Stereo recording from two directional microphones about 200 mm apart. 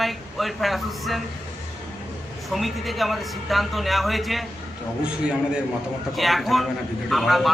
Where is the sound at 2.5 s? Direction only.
Centre (ahead or behind).